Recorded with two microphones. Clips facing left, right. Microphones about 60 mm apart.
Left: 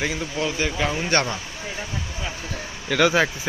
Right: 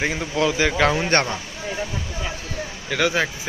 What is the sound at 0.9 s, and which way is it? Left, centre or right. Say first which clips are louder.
Speech: right 2 dB; right.